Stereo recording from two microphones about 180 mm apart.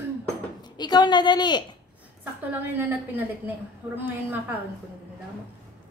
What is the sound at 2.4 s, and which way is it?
A woman's voice, 10° right (ahead or behind).